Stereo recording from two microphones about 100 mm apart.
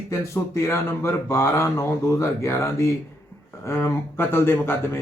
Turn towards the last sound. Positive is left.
turn(degrees=25)  # may be behind; listen again after turning